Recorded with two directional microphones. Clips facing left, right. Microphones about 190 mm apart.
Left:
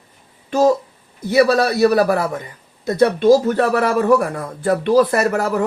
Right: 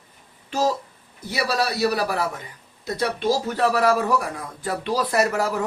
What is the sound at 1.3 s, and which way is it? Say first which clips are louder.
A man's voice: left 10 dB; 50° left (ahead or behind).